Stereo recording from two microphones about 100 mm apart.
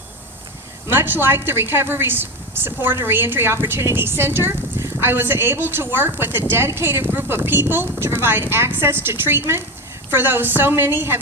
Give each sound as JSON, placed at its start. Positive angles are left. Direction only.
{"t": 0.9, "sound": "a woman's voice", "side_deg": -20}